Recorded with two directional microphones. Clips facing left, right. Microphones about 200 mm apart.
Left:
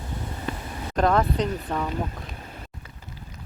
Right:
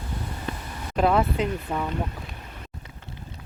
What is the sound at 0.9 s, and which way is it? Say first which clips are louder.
Speech: even; 5° right (ahead or behind).